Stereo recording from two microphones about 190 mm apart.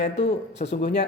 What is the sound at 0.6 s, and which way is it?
Speech, 45° left (ahead or behind).